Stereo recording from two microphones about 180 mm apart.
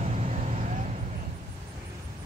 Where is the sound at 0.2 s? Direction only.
40° right (ahead or behind).